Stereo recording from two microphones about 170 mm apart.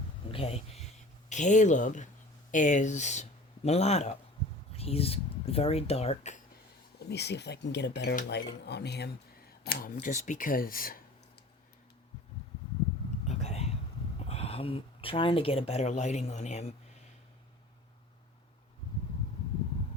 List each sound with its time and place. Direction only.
0.3 s speech: 35° left (ahead or behind)
7.0 s speech: 80° left
9.6 s speech: 55° left (ahead or behind)
13.2 s whispering: 40° left (ahead or behind)
14.2 s speech: 35° left (ahead or behind)